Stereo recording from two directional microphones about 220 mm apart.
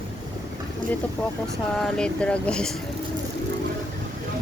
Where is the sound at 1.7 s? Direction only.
5° left (ahead or behind).